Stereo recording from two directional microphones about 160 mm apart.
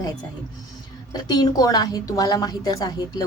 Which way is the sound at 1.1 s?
25° left (ahead or behind).